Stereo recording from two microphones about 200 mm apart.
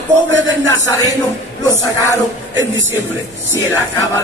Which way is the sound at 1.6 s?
15° left (ahead or behind).